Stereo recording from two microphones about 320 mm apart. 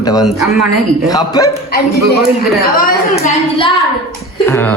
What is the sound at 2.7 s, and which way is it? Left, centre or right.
Speech, left.